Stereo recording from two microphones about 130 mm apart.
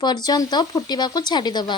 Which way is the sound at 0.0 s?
30° left (ahead or behind).